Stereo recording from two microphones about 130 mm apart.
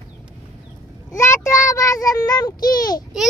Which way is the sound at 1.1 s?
20° left (ahead or behind).